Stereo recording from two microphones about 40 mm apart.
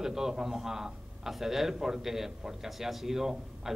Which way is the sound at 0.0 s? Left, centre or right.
Centre.